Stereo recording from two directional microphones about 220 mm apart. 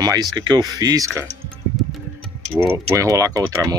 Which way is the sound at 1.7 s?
Centre (ahead or behind).